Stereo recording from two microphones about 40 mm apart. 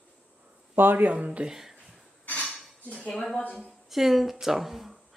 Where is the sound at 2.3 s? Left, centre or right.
Left.